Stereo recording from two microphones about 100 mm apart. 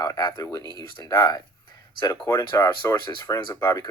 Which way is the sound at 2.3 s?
35° left (ahead or behind).